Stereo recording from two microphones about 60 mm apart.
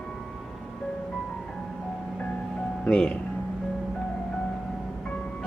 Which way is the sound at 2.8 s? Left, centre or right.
Centre.